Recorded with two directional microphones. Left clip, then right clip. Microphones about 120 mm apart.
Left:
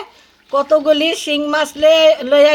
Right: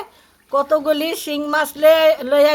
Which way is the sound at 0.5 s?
5° left (ahead or behind).